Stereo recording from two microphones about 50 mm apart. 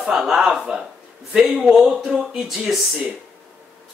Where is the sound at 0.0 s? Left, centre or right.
Centre.